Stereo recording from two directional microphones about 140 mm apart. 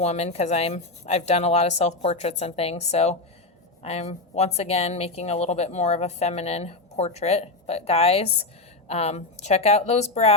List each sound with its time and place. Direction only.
0.0 s speech: 55° left (ahead or behind)